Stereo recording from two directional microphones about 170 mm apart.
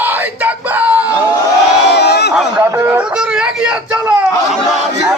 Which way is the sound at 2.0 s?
80° left.